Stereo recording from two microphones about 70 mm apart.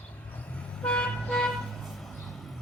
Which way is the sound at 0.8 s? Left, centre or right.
Centre.